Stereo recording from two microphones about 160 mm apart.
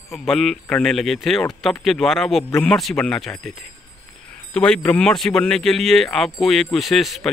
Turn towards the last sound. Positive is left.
turn(degrees=0)  # may be behind; listen again after turning